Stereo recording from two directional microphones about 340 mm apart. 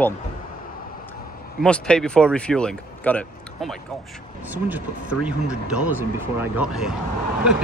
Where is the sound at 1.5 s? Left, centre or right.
Centre.